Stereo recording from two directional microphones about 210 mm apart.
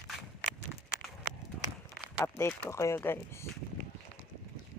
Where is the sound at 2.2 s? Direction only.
10° left (ahead or behind).